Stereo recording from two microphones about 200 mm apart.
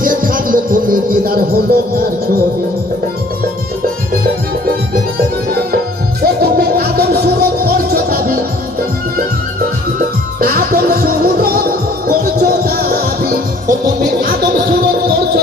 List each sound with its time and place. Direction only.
0.0 s music: 45° right (ahead or behind)
6.4 s music: 50° right (ahead or behind)
10.4 s music: 50° right (ahead or behind)